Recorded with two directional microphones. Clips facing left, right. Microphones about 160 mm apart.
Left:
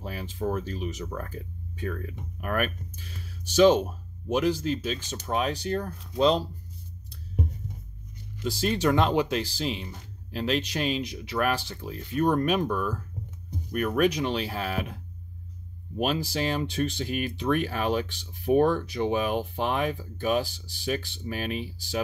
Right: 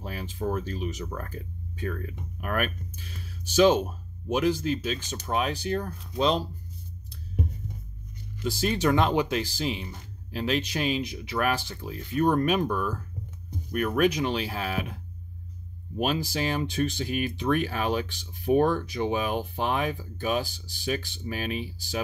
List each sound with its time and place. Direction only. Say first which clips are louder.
0.0 s speech: left 1 dB; centre (ahead or behind)
3.4 s speech: left 1 dB; 5° right (ahead or behind)
8.5 s speech: even; centre (ahead or behind)
16.0 s speech: even; centre (ahead or behind)